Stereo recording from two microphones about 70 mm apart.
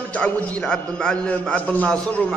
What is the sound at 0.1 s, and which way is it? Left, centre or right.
A man's voice, centre.